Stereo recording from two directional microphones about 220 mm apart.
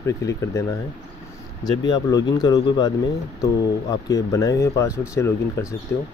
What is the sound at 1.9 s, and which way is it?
Speech, 20° left (ahead or behind).